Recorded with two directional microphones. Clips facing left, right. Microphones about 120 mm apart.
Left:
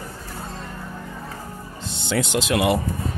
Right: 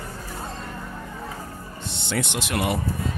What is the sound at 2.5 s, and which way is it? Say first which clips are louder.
Speech: left 5 dB; 90° left.